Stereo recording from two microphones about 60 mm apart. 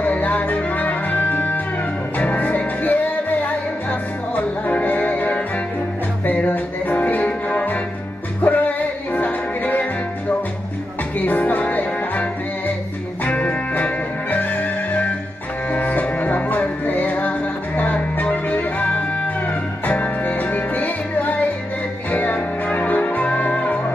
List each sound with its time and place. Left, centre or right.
0.0 s music: left
4.6 s music: left
11.1 s music: left